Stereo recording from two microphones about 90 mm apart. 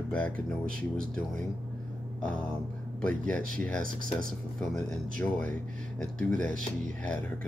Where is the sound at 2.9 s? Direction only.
15° left (ahead or behind).